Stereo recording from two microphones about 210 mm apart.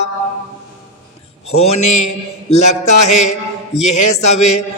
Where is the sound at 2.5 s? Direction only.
35° left (ahead or behind).